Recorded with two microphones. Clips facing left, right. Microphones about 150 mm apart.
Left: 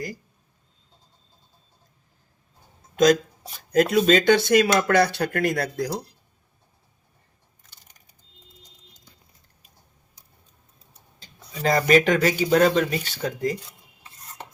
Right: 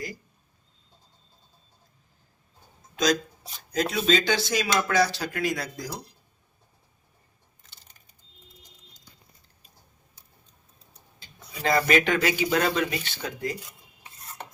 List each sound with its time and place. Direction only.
2.9 s a sound: 55° left (ahead or behind)
3.7 s speech: 50° left (ahead or behind)
11.2 s speech: 40° left (ahead or behind)